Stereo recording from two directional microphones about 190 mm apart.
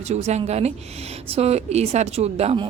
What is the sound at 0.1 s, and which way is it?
A woman's voice, 35° right (ahead or behind).